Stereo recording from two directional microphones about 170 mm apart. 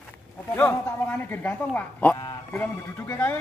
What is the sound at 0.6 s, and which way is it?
Speech, 10° left (ahead or behind).